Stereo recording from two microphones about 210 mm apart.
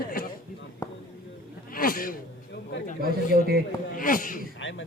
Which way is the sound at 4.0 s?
40° left (ahead or behind).